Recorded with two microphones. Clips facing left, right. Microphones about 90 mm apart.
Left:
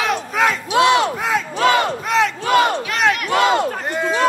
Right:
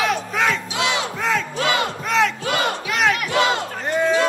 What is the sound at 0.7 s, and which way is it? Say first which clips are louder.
Battle cry: left 9 dB; 50° left (ahead or behind).